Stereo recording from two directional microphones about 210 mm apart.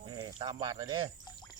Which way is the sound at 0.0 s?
20° right (ahead or behind).